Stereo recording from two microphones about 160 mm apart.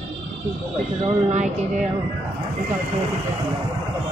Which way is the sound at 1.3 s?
45° right (ahead or behind).